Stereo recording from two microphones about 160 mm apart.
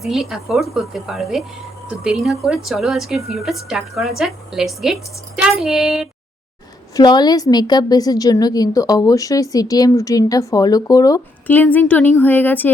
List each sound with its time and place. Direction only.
0.0 s a woman's voice: centre (ahead or behind)
6.9 s a woman's voice: 25° left (ahead or behind)
11.4 s a woman's voice: 10° left (ahead or behind)